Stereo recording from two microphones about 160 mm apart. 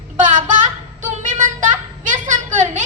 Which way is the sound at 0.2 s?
50° right (ahead or behind).